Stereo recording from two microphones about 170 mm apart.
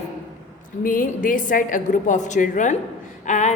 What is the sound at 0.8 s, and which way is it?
A woman's voice, 50° left (ahead or behind).